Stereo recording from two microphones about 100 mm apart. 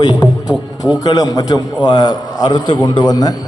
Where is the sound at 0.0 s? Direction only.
45° left (ahead or behind).